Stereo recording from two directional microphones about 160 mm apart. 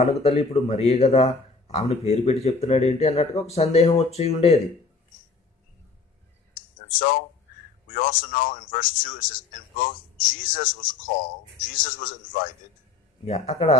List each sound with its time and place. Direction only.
0.0 s speech: 40° left (ahead or behind)
6.5 s clicking: 60° left (ahead or behind)
7.9 s a man's voice: 60° left (ahead or behind)
13.2 s speech: 40° left (ahead or behind)